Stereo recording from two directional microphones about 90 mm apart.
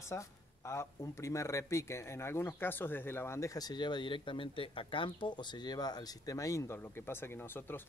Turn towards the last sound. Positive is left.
turn(degrees=25)  # may be behind; listen again after turning